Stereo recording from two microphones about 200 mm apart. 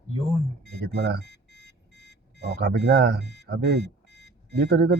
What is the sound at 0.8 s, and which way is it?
Speech, 55° right (ahead or behind).